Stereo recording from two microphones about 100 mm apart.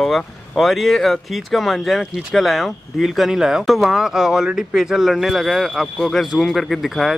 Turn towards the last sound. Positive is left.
turn(degrees=0)  # may be behind; listen again after turning